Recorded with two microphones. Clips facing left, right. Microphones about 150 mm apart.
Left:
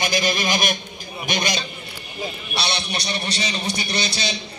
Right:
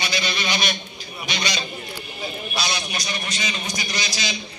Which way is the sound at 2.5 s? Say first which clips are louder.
Left 2 dB; 30° left (ahead or behind).